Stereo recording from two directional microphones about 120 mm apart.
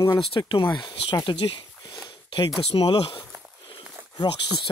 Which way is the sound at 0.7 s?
35° left (ahead or behind).